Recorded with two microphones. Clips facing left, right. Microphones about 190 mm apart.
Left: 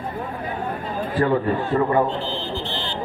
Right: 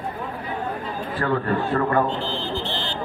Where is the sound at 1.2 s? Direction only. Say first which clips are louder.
Left 3 dB; 15° left (ahead or behind).